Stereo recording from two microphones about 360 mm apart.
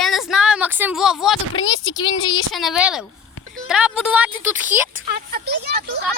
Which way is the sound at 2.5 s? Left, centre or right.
Centre.